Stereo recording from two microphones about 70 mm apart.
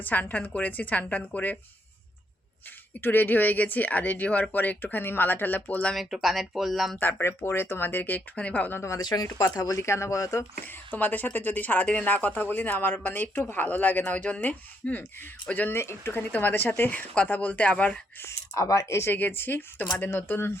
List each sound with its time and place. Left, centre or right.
0.0 s speech: left
3.0 s speech: left
5.9 s speech: centre
7.1 s speech: left
9.0 s speech: left
9.8 s speech: left
10.7 s speech: left
15.8 s speech: left
16.3 s speech: left
18.2 s speech: left
19.1 s speech: left